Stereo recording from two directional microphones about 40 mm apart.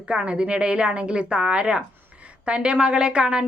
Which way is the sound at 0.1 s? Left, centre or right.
Right.